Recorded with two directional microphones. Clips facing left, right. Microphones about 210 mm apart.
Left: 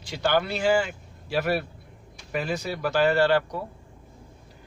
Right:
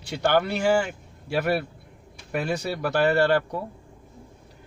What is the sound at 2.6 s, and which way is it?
Speech, 60° right (ahead or behind).